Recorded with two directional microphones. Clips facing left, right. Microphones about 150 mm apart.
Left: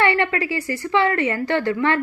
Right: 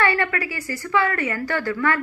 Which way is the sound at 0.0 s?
25° left (ahead or behind).